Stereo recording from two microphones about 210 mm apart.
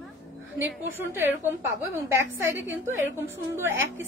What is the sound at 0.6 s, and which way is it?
A woman's voice, 10° right (ahead or behind).